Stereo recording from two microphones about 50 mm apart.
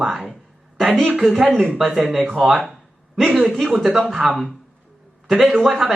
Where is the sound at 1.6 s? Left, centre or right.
Centre.